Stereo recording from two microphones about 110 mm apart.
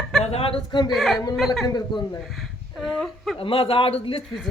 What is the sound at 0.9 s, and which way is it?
Speech, centre (ahead or behind).